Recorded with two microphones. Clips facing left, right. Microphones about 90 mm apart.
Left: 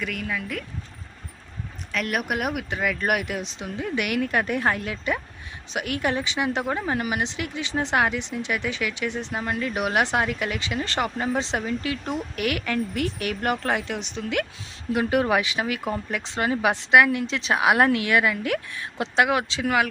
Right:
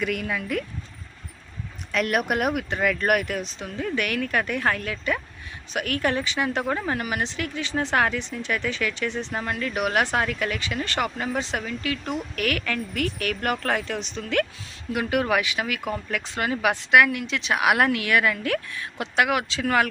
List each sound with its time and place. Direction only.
0.0 s speech: 5° right (ahead or behind)
1.9 s a woman's voice: centre (ahead or behind)
14.9 s speech: 25° left (ahead or behind)